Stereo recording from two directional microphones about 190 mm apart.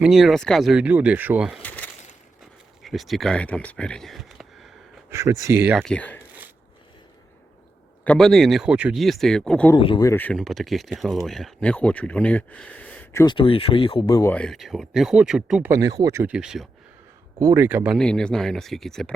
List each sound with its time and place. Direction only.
0.0 s speech: centre (ahead or behind)
1.6 s a sound: 10° left (ahead or behind)
2.8 s speech: centre (ahead or behind)
5.1 s speech: 15° right (ahead or behind)
5.7 s speech: 5° left (ahead or behind)
8.0 s speech: 5° left (ahead or behind)
9.7 s speech: 25° left (ahead or behind)
10.1 s speech: 10° left (ahead or behind)
13.2 s speech: 25° left (ahead or behind)
14.3 s speech: centre (ahead or behind)
15.7 s speech: 20° right (ahead or behind)
17.9 s speech: 5° left (ahead or behind)